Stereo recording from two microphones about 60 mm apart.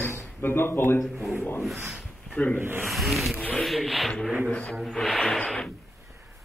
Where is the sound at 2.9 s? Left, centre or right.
Centre.